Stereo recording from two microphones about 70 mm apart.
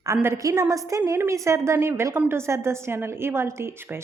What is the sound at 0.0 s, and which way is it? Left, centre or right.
Speech, right.